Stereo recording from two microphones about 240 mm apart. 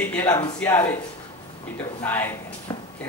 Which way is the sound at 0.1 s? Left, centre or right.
Centre.